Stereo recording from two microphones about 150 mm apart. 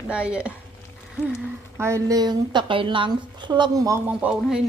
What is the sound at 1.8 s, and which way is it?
Speech, 20° right (ahead or behind).